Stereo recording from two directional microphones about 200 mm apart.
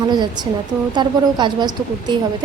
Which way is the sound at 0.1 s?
20° right (ahead or behind).